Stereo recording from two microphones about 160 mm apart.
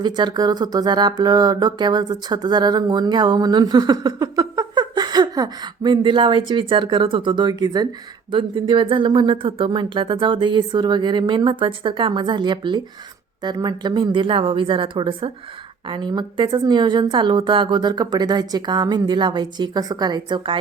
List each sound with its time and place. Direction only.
0.0 s speech: 25° right (ahead or behind)